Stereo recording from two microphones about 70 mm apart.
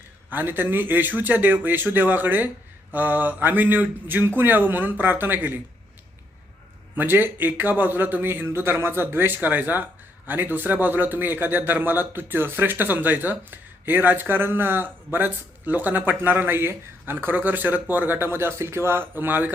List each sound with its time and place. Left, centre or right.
0.3 s a man's voice: right
6.9 s a man's voice: right